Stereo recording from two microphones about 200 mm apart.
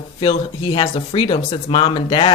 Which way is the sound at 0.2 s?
25° left (ahead or behind).